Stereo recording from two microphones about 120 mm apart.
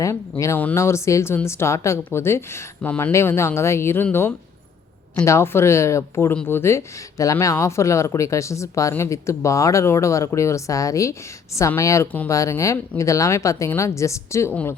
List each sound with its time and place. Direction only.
0.0 s speech: 25° left (ahead or behind)